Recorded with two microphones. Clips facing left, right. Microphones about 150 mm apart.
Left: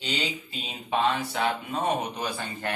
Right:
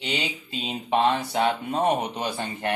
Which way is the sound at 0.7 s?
35° right (ahead or behind).